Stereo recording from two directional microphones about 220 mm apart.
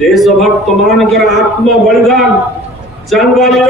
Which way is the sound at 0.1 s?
Centre (ahead or behind).